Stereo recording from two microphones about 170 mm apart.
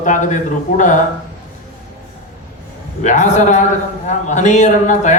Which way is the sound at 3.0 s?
45° left (ahead or behind).